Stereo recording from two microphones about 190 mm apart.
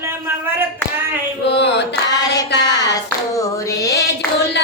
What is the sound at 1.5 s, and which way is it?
Mantra, 65° left (ahead or behind).